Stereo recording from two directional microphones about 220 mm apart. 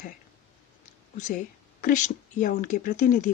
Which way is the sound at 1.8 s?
35° left (ahead or behind).